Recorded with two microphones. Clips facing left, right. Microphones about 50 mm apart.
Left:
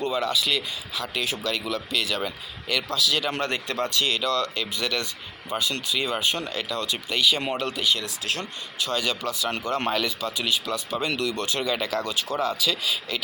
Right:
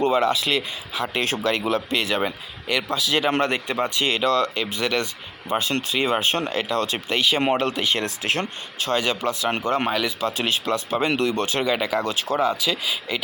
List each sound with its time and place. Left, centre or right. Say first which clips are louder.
0.0 s speech: right 5 dB; right
2.6 s speech: right 3 dB; centre
3.0 s speech: right 6 dB; right
9.0 s speech: right 4 dB; right
9.8 s speech: right 2 dB; centre
10.2 s speech: right 4 dB; right
11.6 s speech: right 3 dB; centre
12.0 s speech: right 4 dB; right
12.4 s speech: right 3 dB; centre